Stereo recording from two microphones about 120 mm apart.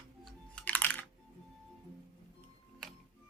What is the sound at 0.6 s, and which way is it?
Computer keyboard, 15° left (ahead or behind).